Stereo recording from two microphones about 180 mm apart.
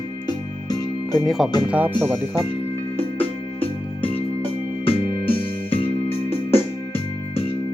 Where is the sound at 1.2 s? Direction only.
Centre (ahead or behind).